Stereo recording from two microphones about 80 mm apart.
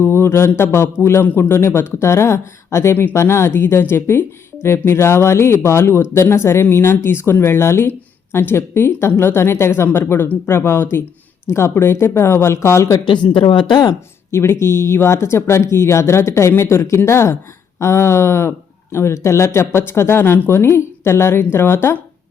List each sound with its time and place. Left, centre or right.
0.0 s speech: left
13.1 s speech: left
14.3 s speech: left